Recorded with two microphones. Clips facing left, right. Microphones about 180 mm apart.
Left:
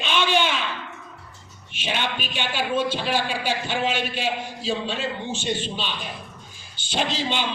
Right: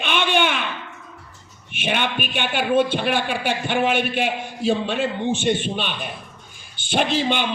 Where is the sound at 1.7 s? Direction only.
60° right (ahead or behind).